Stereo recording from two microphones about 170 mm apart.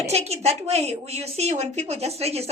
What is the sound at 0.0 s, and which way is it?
A woman's voice, 40° right (ahead or behind).